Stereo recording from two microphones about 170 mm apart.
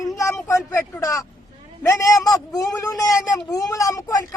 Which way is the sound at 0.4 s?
15° left (ahead or behind).